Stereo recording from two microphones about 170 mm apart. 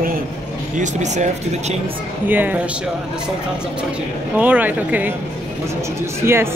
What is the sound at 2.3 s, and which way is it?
Speech, 10° right (ahead or behind).